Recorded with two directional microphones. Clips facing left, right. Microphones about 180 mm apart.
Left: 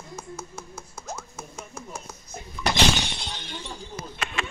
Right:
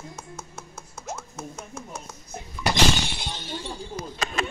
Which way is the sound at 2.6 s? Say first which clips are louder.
Right 1 dB; 10° right (ahead or behind).